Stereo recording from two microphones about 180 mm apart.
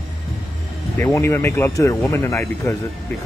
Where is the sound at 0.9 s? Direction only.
15° left (ahead or behind).